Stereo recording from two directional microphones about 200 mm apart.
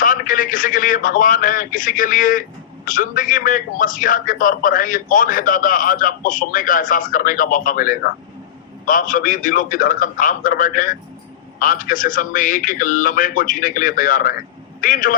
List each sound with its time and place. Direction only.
0.0 s a man's voice: 45° left (ahead or behind)